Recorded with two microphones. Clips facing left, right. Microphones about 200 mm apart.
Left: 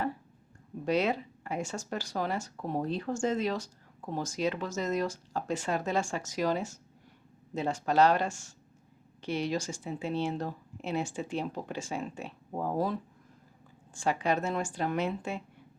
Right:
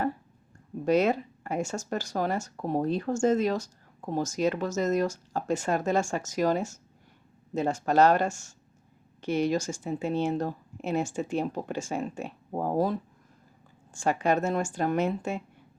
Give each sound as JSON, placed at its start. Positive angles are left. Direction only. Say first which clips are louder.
{"t": 0.9, "sound": "speech", "louder": "right 5 dB", "side_deg": -45}